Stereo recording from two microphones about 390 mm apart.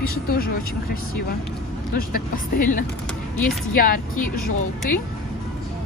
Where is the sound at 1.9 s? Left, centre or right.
Left.